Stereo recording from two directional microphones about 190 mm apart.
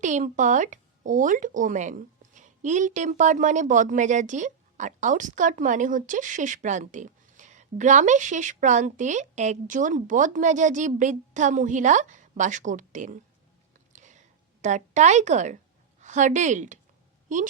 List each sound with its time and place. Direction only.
0.0 s speech: 40° right (ahead or behind)
13.9 s a sound: 40° right (ahead or behind)
14.6 s a woman's voice: 40° right (ahead or behind)